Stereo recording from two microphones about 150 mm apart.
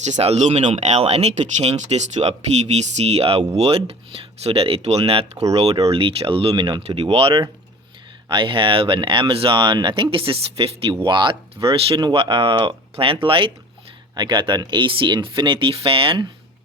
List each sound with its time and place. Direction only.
0.0 s speech: 45° right (ahead or behind)